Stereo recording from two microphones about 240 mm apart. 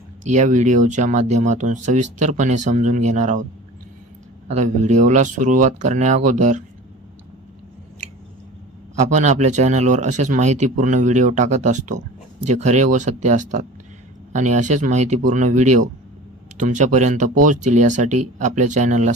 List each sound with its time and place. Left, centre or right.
0.3 s speech: right
4.4 s speech: right
9.0 s speech: right